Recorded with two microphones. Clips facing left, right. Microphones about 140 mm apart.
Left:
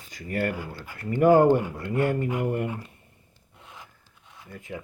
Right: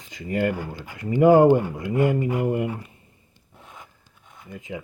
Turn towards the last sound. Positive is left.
turn(degrees=-15)  # may be behind; listen again after turning